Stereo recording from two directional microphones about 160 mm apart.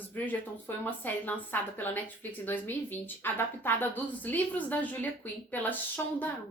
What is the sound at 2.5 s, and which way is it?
Speech, 10° left (ahead or behind).